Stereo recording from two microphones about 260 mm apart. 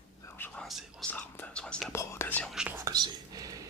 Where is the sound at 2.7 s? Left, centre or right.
Centre.